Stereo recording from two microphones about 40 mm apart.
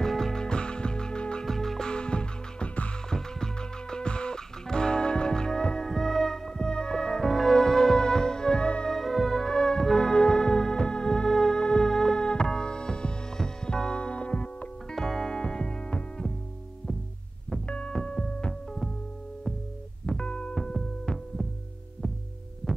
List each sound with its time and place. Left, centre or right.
0.0 s music: centre
1.4 s music: centre
1.9 s music: left
3.1 s music: centre
8.8 s music: centre; by 15.0 s left
15.0 s music: centre
17.5 s throbbing: left
18.0 s music: left
20.1 s music: left
20.7 s throbbing: centre